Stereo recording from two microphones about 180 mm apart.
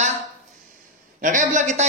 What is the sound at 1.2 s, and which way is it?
Speech, 45° right (ahead or behind).